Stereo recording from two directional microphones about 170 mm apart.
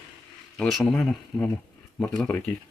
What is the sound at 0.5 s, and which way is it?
Speech, centre (ahead or behind).